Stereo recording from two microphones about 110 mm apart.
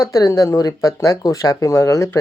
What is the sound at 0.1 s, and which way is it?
Speech, 30° left (ahead or behind).